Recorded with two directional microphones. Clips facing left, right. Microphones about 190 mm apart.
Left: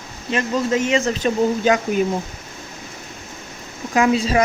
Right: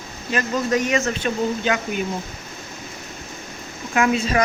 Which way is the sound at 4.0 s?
30° left (ahead or behind).